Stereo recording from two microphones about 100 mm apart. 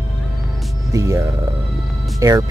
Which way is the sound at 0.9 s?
30° right (ahead or behind).